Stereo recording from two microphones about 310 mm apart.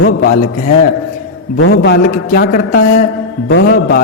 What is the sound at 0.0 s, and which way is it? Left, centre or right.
Speech, left.